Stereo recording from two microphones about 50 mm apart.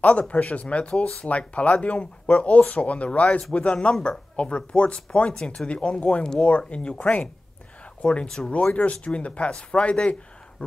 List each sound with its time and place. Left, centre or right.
0.0 s speech: left